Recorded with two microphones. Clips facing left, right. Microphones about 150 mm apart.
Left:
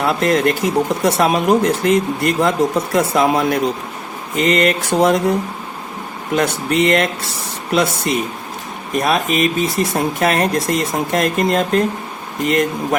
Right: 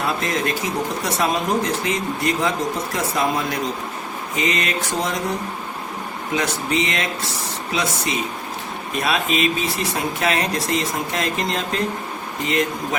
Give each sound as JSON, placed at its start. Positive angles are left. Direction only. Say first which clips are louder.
{"t": 0.1, "sound": "speech", "louder": "left 7 dB", "side_deg": 65}
{"t": 6.3, "sound": "speech", "louder": "left 5 dB", "side_deg": 60}